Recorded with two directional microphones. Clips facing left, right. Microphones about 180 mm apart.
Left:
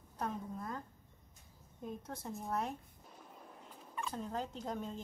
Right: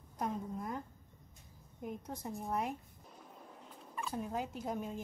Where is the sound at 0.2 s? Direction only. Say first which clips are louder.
Right 2 dB; 15° right (ahead or behind).